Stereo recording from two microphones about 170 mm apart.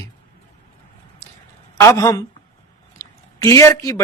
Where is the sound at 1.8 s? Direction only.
15° left (ahead or behind).